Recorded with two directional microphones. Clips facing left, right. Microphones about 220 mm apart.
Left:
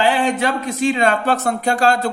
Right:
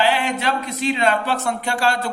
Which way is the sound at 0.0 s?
50° left (ahead or behind).